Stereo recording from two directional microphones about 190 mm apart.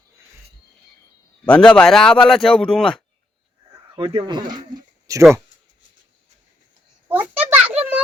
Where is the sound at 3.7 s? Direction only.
30° right (ahead or behind).